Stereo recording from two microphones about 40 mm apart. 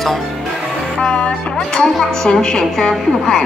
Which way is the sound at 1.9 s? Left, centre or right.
Centre.